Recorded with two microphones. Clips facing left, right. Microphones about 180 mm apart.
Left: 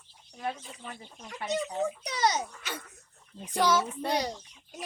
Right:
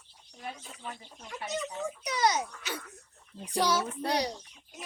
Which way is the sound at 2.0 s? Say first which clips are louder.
Right 3 dB; 30° left (ahead or behind).